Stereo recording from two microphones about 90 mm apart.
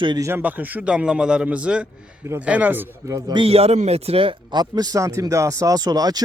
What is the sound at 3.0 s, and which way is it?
Speech, 35° right (ahead or behind).